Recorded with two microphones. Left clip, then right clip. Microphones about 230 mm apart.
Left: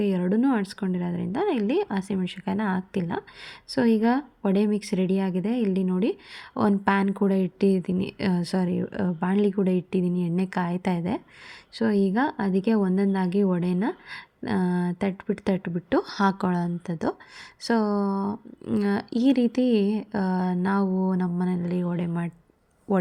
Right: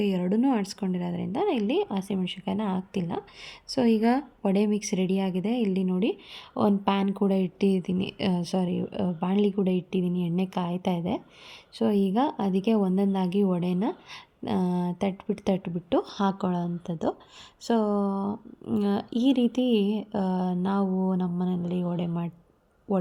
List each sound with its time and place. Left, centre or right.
0.0 s speech: centre